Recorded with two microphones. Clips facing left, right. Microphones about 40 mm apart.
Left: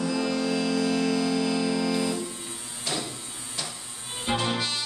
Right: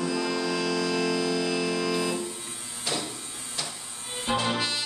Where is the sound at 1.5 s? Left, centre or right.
Right.